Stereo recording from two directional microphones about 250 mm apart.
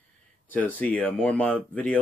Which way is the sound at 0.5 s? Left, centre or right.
Centre.